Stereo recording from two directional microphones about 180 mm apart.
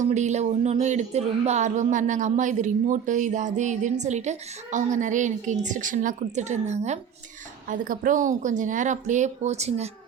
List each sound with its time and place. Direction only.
0.1 s speech: 40° right (ahead or behind)